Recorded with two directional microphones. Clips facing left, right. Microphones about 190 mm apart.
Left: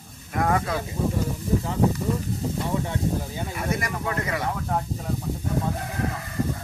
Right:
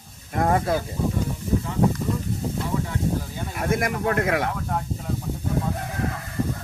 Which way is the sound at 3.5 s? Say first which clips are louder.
Right 5 dB; 55° right (ahead or behind).